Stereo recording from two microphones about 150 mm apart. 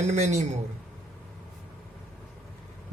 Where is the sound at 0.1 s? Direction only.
50° right (ahead or behind).